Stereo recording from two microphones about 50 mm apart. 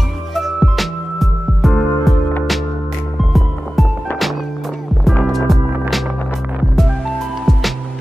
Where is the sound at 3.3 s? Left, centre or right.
Centre.